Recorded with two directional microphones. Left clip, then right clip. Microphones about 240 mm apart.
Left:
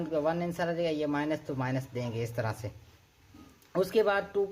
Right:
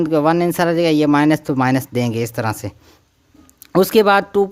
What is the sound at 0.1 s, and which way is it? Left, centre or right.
Speech, right.